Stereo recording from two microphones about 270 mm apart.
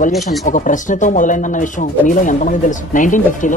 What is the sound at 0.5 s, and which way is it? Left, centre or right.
Speech, left.